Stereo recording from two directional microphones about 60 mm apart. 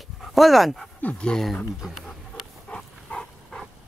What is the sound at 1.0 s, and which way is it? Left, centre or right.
Speech, centre.